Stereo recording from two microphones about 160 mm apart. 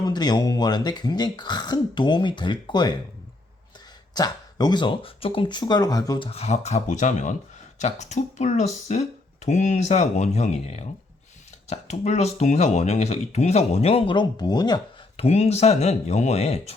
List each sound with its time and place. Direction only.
0.0 s speech: 25° left (ahead or behind)
4.1 s speech: 25° left (ahead or behind)
6.2 s speech: 40° left (ahead or behind); by 15.2 s 25° left (ahead or behind)
15.2 s speech: 40° left (ahead or behind)